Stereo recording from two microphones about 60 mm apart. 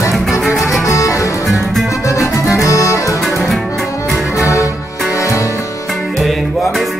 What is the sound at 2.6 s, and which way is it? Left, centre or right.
Accordion, left.